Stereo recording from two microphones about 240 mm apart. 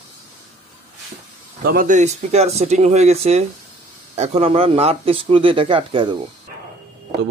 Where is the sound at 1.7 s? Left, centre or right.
Right.